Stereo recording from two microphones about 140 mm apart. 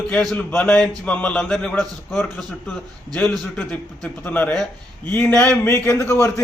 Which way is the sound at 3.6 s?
10° left (ahead or behind).